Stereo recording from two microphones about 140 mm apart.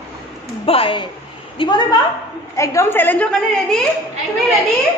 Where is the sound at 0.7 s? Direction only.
40° left (ahead or behind).